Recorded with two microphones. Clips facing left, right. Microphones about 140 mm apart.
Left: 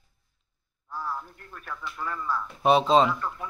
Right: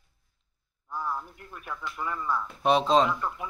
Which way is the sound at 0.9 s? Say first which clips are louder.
Right 1 dB; 20° right (ahead or behind).